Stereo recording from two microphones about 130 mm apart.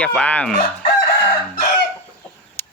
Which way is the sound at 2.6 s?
15° left (ahead or behind).